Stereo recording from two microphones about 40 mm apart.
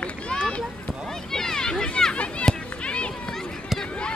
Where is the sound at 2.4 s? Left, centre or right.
Left.